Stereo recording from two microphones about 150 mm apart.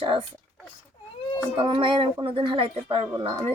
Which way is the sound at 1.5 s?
35° right (ahead or behind).